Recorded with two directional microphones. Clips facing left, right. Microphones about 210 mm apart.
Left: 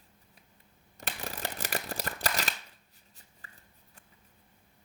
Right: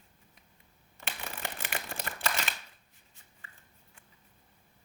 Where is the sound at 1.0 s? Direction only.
40° left (ahead or behind).